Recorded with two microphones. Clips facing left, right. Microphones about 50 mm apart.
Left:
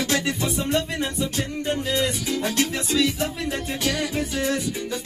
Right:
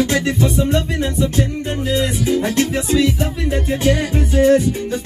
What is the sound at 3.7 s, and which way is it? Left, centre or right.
Music, right.